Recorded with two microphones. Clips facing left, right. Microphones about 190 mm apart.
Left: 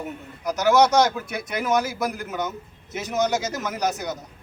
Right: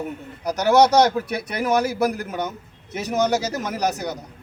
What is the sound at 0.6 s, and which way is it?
Speech, 35° right (ahead or behind).